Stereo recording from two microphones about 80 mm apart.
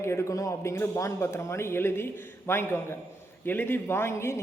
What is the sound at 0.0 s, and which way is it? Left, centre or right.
Speech, left.